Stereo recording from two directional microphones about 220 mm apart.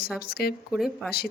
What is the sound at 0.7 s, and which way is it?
Speech, centre (ahead or behind).